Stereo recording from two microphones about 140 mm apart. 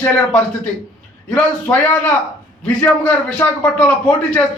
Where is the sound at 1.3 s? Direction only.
10° left (ahead or behind).